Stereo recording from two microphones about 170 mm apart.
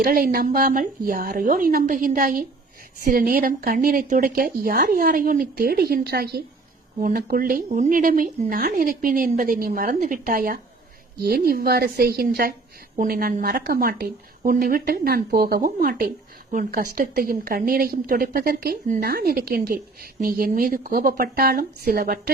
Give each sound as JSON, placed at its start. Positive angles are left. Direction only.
{"t": 0.0, "sound": "a woman's voice", "side_deg": -60}